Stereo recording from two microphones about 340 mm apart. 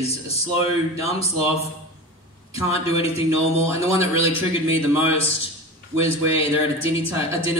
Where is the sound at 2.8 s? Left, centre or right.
Centre.